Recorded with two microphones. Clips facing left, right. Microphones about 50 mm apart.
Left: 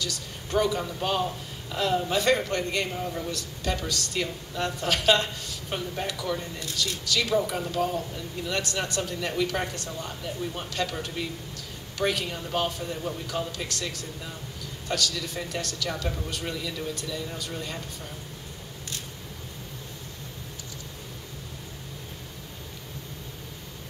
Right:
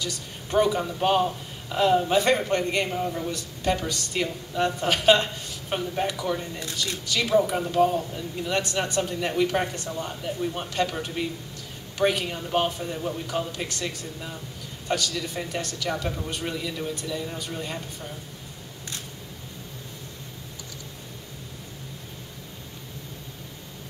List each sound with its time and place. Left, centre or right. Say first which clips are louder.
0.0 s speech: right 1 dB; right
2.9 s speech: right 4 dB; centre
3.3 s speech: right 4 dB; right
6.6 s speech: even; right
12.9 s speech: right 2 dB; centre
13.5 s speech: right 2 dB; right